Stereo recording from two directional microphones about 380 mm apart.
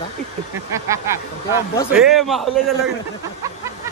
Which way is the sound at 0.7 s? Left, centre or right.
Centre.